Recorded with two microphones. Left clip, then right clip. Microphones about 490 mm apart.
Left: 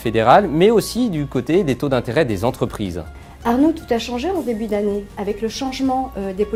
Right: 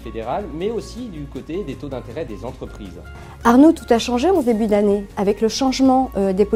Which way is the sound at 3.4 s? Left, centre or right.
Right.